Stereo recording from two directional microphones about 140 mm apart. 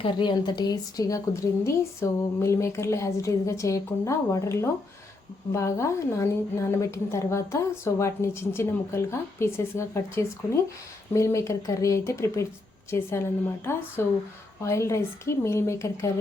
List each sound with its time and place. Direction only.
0.0 s a woman's voice: 35° left (ahead or behind)